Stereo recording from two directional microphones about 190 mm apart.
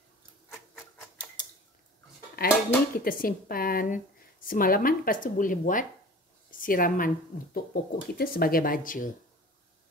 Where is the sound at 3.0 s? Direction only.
50° left (ahead or behind).